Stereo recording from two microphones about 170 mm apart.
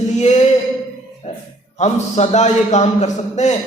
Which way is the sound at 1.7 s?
40° left (ahead or behind).